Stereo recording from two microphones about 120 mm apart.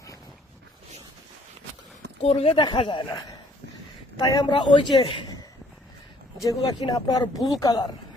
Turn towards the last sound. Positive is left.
turn(degrees=30)  # may be behind; listen again after turning